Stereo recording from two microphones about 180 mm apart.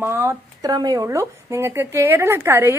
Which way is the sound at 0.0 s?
15° right (ahead or behind).